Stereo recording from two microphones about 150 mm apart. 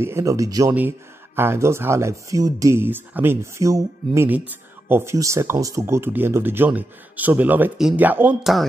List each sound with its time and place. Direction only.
0.0 s speech: 20° right (ahead or behind)